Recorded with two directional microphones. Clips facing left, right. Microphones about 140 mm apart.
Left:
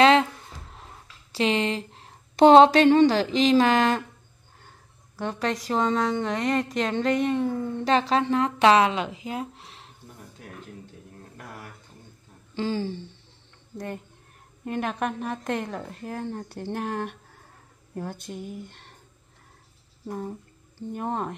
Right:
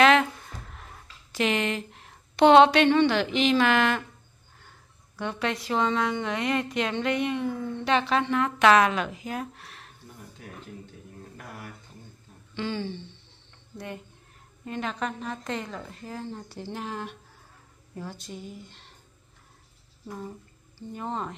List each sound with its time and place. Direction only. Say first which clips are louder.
0.0 s a sound: left 2 dB; 30° left (ahead or behind)
1.3 s a woman's voice: left 2 dB; 30° left (ahead or behind)
12.5 s a woman's voice: left 3 dB; 35° left (ahead or behind)
14.6 s speech: left 3 dB; 55° left (ahead or behind)
20.9 s speech: left 3 dB; 55° left (ahead or behind)